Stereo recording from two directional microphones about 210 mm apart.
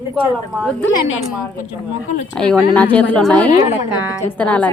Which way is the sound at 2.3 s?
5° left (ahead or behind).